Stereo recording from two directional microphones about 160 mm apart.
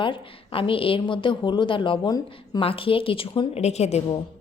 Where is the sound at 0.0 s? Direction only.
35° left (ahead or behind).